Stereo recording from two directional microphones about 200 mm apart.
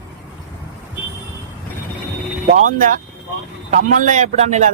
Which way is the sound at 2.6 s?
40° right (ahead or behind).